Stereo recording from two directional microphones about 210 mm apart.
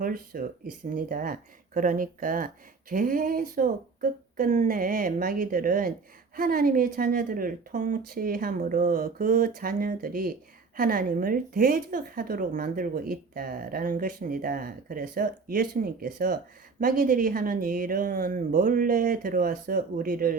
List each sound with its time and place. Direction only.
0.0 s a woman's voice: 40° right (ahead or behind)